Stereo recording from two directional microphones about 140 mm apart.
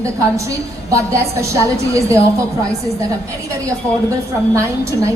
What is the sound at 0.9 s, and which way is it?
A woman's voice, 20° right (ahead or behind).